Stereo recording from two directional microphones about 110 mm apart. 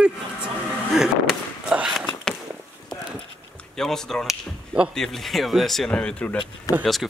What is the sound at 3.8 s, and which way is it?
Speech, 5° left (ahead or behind).